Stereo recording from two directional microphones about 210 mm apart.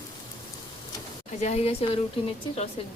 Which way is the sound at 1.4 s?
30° left (ahead or behind).